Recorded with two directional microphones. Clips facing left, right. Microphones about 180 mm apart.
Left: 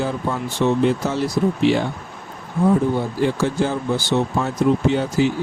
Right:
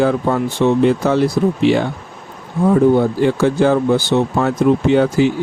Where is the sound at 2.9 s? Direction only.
65° right (ahead or behind).